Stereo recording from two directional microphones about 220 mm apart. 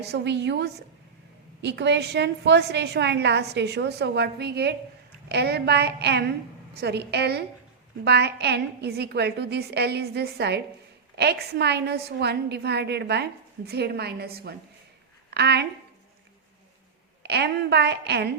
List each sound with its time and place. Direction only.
0.0 s a woman's voice: 50° right (ahead or behind)
17.2 s a woman's voice: 50° right (ahead or behind)